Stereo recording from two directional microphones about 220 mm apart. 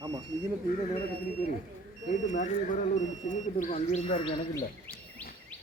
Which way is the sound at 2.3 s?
35° left (ahead or behind).